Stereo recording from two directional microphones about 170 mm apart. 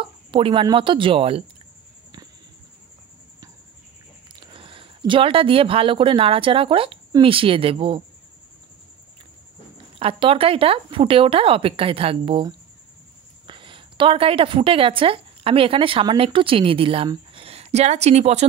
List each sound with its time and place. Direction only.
0.0 s speech: 30° right (ahead or behind)
4.5 s speech: 30° right (ahead or behind)
9.9 s a woman's voice: 30° right (ahead or behind)